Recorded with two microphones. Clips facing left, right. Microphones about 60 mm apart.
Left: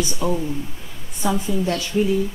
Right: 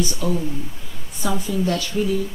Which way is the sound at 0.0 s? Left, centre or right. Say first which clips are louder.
Even; left.